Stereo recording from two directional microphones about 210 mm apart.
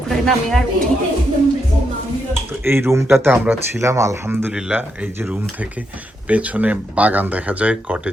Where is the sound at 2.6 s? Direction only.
10° right (ahead or behind).